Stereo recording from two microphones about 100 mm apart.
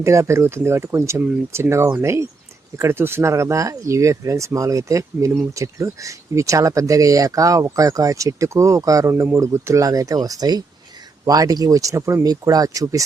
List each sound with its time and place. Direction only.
0.0 s speech: 30° right (ahead or behind)
1.2 s speech: 15° right (ahead or behind); by 13.0 s 35° right (ahead or behind)